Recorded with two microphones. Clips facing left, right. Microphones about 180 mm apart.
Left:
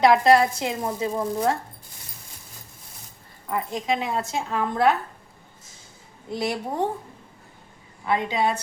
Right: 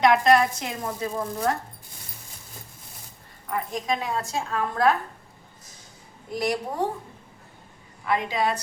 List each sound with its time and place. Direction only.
0.0 s speech: 30° left (ahead or behind)
3.5 s speech: 25° left (ahead or behind)
6.3 s speech: 25° left (ahead or behind)
8.0 s speech: 30° left (ahead or behind)